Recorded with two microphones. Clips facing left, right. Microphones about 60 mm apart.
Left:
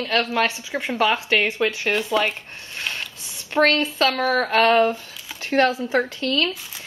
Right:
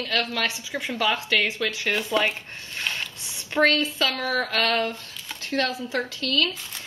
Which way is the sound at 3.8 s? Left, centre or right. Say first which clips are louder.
Left 5 dB; left.